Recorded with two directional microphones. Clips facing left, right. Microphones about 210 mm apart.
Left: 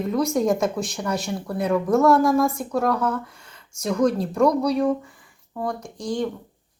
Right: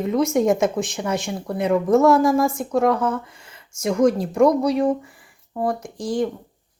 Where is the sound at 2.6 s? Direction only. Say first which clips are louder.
Right 3 dB; 20° right (ahead or behind).